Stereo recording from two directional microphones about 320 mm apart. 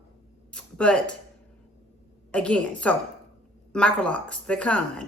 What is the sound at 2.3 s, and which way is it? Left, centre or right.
A woman's voice, centre.